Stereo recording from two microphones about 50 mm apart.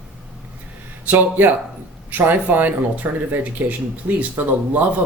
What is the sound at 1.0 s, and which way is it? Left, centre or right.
Speech, right.